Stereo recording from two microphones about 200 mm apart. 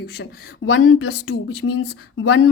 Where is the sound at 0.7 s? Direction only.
90° left.